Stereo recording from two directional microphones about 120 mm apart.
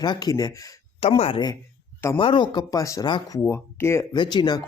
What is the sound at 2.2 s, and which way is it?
Speech, 45° left (ahead or behind).